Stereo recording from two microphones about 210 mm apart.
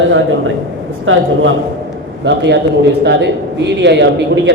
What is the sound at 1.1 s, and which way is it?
Speech, 70° right (ahead or behind).